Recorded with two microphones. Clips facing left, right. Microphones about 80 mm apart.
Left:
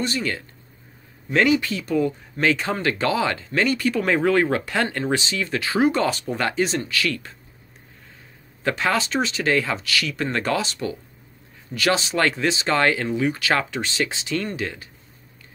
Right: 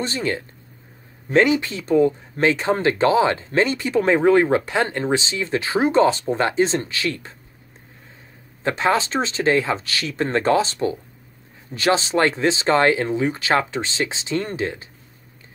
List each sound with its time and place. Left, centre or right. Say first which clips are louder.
0.0 s speech: right 1 dB; right
8.6 s speech: right 3 dB; right